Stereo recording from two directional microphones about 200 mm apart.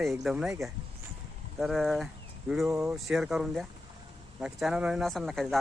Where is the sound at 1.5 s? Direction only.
Centre (ahead or behind).